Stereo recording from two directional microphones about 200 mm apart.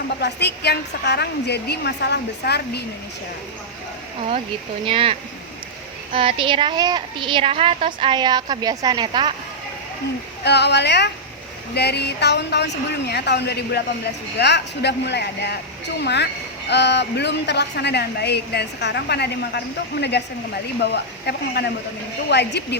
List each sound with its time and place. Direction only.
0.2 s a woman's voice: 55° left (ahead or behind)
4.9 s a woman's voice: 25° right (ahead or behind)
6.1 s a woman's voice: 25° right (ahead or behind)
10.4 s a woman's voice: 55° left (ahead or behind)